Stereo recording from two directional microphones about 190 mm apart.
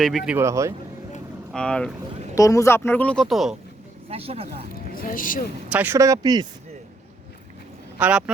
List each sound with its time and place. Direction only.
0.0 s speech: centre (ahead or behind)
0.3 s speech: 15° right (ahead or behind)
1.5 s speech: 5° left (ahead or behind)
2.3 s speech: 15° left (ahead or behind); by 3.6 s centre (ahead or behind)
4.1 s speech: 30° right (ahead or behind)
4.7 s speech: 50° left (ahead or behind)
5.7 s speech: 10° right (ahead or behind)
7.9 s speech: 10° right (ahead or behind)